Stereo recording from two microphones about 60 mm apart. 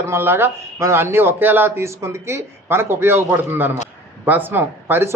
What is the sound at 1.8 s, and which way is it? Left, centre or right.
Speech, right.